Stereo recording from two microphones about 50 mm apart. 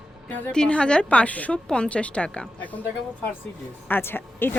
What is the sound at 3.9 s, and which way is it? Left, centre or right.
Speech, left.